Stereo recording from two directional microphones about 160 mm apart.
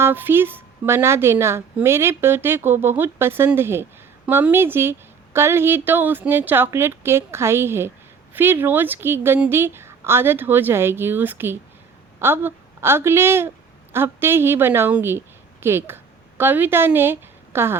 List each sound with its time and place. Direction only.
0.0 s a woman's voice: 15° right (ahead or behind)